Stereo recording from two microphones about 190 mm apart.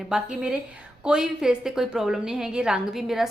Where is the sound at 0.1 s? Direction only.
5° right (ahead or behind).